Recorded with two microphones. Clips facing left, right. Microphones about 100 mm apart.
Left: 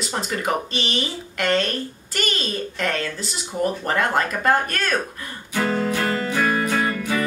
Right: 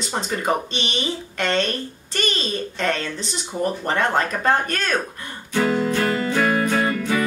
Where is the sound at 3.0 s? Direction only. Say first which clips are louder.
Even; 5° left (ahead or behind).